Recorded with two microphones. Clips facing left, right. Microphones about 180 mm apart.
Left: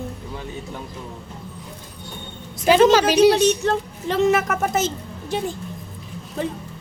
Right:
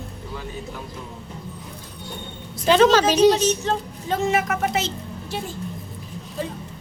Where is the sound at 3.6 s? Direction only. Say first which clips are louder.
Left 2 dB; 65° left (ahead or behind); by 4.9 s 50° left (ahead or behind).